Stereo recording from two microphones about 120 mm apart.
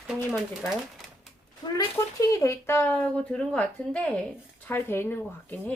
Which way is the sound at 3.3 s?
10° left (ahead or behind).